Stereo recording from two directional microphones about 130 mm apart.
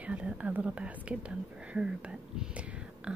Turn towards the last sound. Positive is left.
turn(degrees=-10)  # may be behind; listen again after turning